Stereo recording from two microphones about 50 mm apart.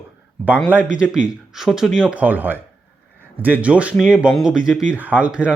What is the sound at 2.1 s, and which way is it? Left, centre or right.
Speech, right.